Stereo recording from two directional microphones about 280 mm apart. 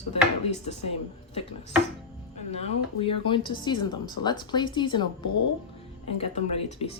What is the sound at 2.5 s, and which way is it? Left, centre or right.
Speech, left.